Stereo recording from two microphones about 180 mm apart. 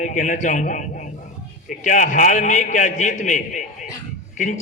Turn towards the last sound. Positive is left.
turn(degrees=45)  # may be behind; listen again after turning